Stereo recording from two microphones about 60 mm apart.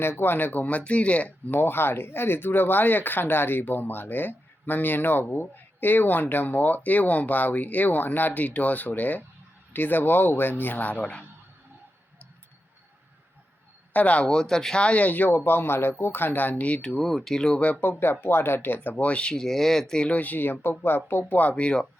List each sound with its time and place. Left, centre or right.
0.0 s speech: left
1.5 s speech: left
13.9 s speech: left
14.3 s speech: centre
16.9 s speech: centre
17.6 s speech: left
18.0 s speech: left; by 20.1 s centre
20.1 s speech: left
21.5 s speech: centre